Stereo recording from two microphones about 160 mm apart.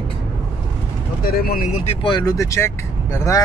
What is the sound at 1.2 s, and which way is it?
Speech, 70° left (ahead or behind).